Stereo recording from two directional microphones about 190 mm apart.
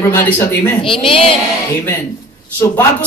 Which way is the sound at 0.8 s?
30° left (ahead or behind).